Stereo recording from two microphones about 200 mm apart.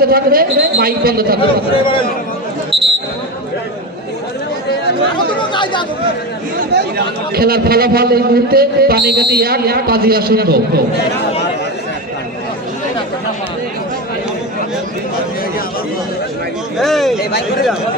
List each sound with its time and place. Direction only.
0.0 s a man's voice: 50° right (ahead or behind)
2.7 s basketball bounce: 30° right (ahead or behind)
5.4 s chatter: 25° left (ahead or behind)
7.3 s a man's voice: 50° right (ahead or behind)
16.8 s speech: centre (ahead or behind)